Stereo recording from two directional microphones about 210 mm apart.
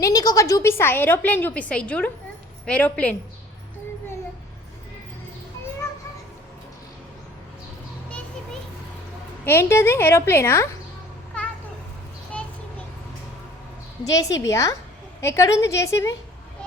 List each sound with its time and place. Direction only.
0.0 s a woman's voice: 15° left (ahead or behind)
9.5 s a woman's voice: 10° left (ahead or behind)
14.0 s a woman's voice: 15° left (ahead or behind)